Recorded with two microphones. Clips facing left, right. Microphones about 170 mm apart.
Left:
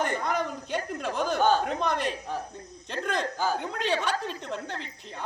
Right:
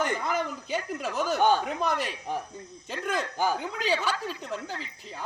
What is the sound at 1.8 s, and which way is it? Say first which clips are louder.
Speech: even; 5° right (ahead or behind).